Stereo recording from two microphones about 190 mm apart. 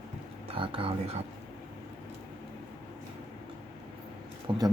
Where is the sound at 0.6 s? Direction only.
25° right (ahead or behind).